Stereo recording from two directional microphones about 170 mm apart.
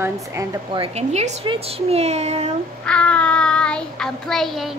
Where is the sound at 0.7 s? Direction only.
35° right (ahead or behind).